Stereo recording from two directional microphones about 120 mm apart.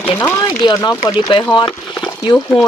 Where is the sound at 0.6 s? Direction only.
35° left (ahead or behind).